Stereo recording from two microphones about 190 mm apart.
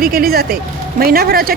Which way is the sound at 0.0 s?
50° right (ahead or behind).